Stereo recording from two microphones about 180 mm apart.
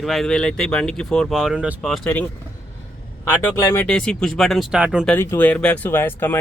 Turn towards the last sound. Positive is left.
turn(degrees=10)  # may be behind; listen again after turning